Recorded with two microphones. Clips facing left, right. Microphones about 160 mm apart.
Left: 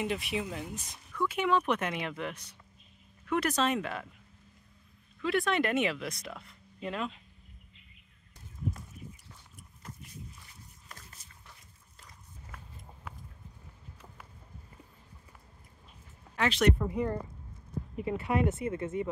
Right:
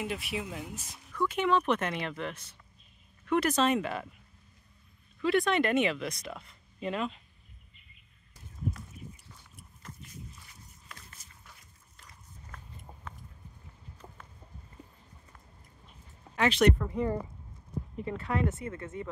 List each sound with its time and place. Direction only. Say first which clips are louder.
0.0 s speech: left 2 dB; 5° right (ahead or behind)
1.1 s speech: right 1 dB; 5° left (ahead or behind)
3.3 s speech: right 3 dB; centre (ahead or behind)
5.2 s speech: right 2 dB; centre (ahead or behind)
12.5 s a sound: even; 5° left (ahead or behind)
16.3 s speech: right 2 dB; centre (ahead or behind)
16.7 s speech: even; 15° left (ahead or behind)